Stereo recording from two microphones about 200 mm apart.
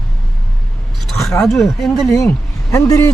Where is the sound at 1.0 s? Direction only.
Centre (ahead or behind).